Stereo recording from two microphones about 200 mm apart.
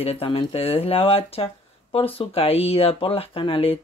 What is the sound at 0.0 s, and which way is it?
Speech, 30° left (ahead or behind).